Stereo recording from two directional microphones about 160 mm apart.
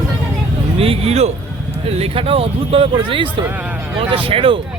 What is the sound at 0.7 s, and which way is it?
Speech, 35° right (ahead or behind).